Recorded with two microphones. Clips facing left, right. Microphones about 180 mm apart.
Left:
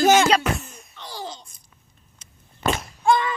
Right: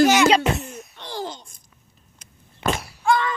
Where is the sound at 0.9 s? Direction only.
55° right (ahead or behind).